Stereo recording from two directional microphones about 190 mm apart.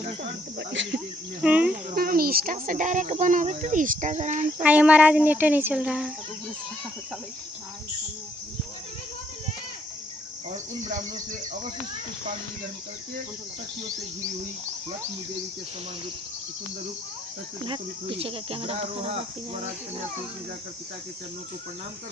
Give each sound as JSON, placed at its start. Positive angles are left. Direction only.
{"t": 0.7, "sound": "speech", "side_deg": -70}
{"t": 0.9, "sound": "cricket", "side_deg": -5}
{"t": 1.9, "sound": "speech", "side_deg": -50}
{"t": 4.6, "sound": "speech", "side_deg": -5}
{"t": 18.2, "sound": "speech", "side_deg": -30}